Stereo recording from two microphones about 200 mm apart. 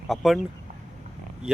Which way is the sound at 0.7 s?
35° right (ahead or behind).